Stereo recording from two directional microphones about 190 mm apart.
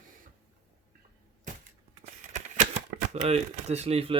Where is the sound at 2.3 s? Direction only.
40° right (ahead or behind).